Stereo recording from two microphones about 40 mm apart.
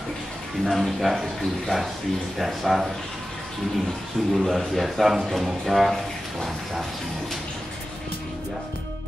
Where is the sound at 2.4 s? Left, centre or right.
Centre.